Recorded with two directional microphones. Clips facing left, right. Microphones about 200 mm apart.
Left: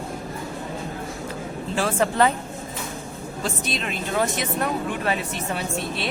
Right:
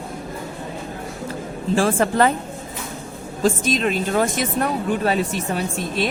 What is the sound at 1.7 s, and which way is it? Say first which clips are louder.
Speech: right 4 dB; 45° right (ahead or behind).